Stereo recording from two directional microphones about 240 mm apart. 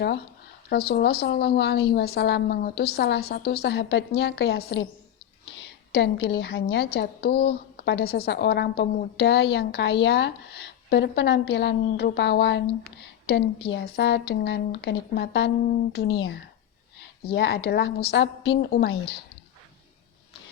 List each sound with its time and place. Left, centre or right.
0.7 s a woman's voice: left
17.3 s a woman's voice: left